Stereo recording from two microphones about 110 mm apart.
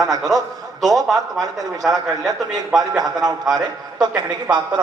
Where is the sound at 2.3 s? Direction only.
35° right (ahead or behind).